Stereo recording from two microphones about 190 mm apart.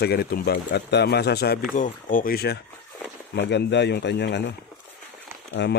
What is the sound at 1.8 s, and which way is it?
Speech, 45° left (ahead or behind).